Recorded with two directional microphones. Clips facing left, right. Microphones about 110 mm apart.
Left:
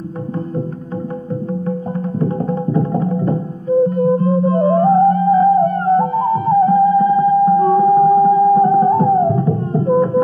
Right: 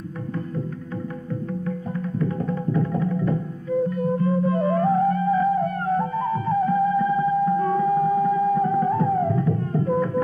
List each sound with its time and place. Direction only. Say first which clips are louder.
1.5 s music: left 8 dB; 35° left (ahead or behind)